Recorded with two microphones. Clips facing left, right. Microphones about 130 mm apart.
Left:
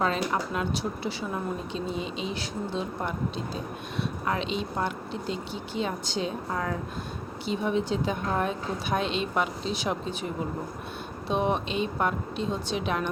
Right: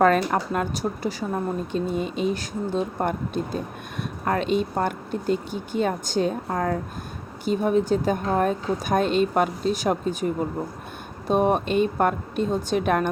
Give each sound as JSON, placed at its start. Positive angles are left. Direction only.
{"t": 0.0, "sound": "speech", "side_deg": -55}